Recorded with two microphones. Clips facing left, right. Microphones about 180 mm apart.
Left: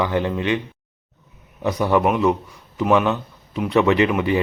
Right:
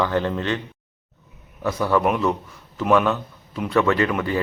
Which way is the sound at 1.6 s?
20° left (ahead or behind).